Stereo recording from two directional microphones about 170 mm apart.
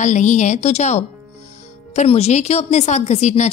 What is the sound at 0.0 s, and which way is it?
A woman's voice, 45° left (ahead or behind).